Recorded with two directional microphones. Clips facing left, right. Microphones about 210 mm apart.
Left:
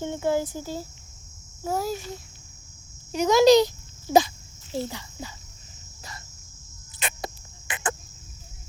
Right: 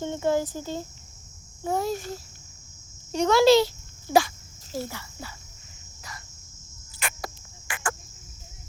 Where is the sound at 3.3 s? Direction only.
15° left (ahead or behind).